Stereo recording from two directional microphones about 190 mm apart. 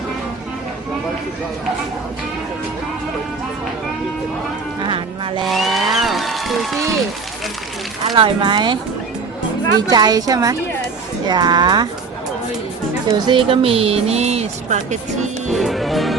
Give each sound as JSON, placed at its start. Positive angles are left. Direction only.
{"t": 4.8, "sound": "a woman's voice", "side_deg": -25}
{"t": 5.5, "sound": "speech", "side_deg": 0}
{"t": 8.1, "sound": "a woman's voice", "side_deg": -25}
{"t": 13.2, "sound": "speech", "side_deg": -25}
{"t": 15.5, "sound": "music", "side_deg": 0}